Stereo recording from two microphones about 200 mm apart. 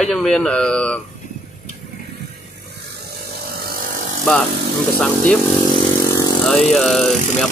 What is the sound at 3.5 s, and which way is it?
Vehicle, 50° right (ahead or behind).